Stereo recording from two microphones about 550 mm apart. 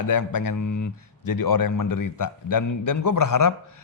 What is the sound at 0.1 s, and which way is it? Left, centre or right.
A man's voice, left.